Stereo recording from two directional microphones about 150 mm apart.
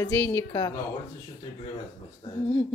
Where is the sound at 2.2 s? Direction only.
30° left (ahead or behind).